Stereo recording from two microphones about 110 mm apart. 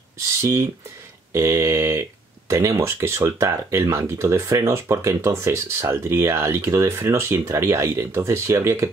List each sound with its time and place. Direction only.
0.4 s speech: 25° right (ahead or behind)